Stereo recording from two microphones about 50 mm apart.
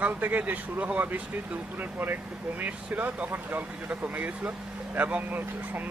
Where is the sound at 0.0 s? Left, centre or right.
Right.